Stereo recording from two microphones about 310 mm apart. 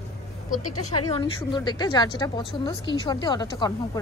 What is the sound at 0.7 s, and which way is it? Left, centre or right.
Speech, left.